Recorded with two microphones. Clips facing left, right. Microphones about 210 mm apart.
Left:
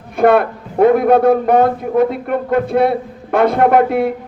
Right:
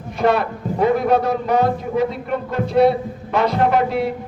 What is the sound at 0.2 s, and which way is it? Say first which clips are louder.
A woman's voice: left 6 dB; 55° left (ahead or behind).